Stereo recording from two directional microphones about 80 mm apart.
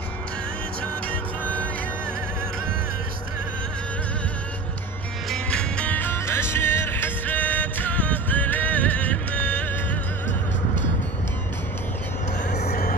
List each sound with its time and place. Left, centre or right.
1.4 s music: centre
5.3 s music: centre